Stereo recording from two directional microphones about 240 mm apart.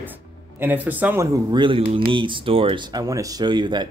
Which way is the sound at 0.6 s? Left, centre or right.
Centre.